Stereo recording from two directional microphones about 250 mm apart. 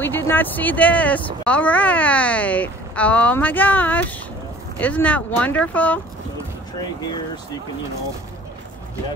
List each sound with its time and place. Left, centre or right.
0.0 s speech: centre